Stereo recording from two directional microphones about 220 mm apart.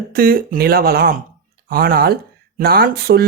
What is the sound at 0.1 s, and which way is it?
Speech, 40° right (ahead or behind).